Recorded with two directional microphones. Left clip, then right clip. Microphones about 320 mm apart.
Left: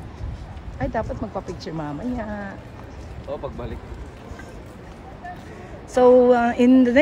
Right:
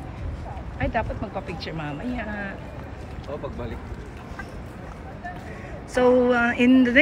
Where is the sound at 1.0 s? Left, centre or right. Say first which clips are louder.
Left 1 dB; centre.